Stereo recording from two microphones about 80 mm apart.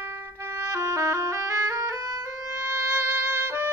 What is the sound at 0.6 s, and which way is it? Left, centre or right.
Music, right.